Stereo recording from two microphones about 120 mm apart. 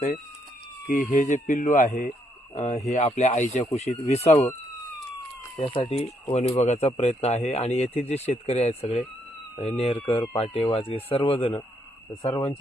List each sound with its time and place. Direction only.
0.9 s speech: 90° left
2.6 s speech: 70° left (ahead or behind); by 3.7 s 85° left
3.7 s speech: 60° left (ahead or behind)
5.5 s speech: 45° left (ahead or behind)
6.0 s speech: 60° left (ahead or behind)